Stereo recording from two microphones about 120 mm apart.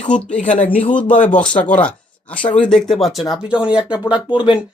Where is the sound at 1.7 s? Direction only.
10° left (ahead or behind).